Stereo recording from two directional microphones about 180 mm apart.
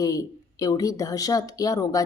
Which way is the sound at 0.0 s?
20° left (ahead or behind).